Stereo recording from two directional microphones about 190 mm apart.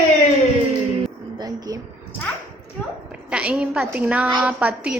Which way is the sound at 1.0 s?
20° right (ahead or behind).